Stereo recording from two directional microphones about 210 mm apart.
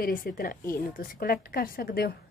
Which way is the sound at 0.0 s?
45° left (ahead or behind).